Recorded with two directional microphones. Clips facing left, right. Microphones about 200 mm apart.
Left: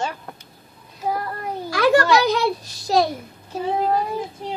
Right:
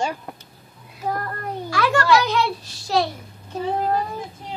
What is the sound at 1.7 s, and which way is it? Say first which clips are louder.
A child's voice: left 3 dB; 40° left (ahead or behind).